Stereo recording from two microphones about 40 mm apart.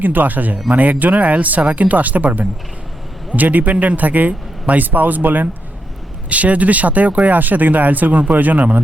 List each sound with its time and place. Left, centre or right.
0.0 s speech: right
6.2 s speech: right